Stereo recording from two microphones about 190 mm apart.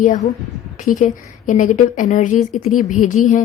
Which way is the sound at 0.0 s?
40° left (ahead or behind).